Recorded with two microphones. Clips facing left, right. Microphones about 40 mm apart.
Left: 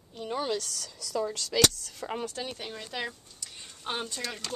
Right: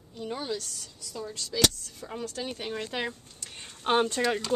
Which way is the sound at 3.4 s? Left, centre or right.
Right.